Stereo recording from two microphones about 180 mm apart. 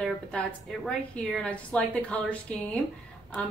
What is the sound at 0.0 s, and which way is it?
A woman's voice, 5° left (ahead or behind).